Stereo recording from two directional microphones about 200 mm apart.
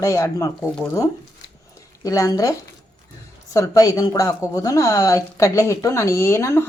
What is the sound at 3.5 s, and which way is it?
A woman's voice, 15° left (ahead or behind).